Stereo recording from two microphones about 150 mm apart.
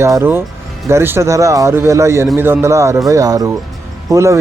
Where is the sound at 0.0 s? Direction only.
15° right (ahead or behind).